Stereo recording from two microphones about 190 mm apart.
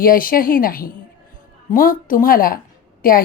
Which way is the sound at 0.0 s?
50° left (ahead or behind).